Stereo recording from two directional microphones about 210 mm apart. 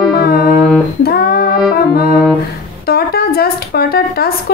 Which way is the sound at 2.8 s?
45° left (ahead or behind).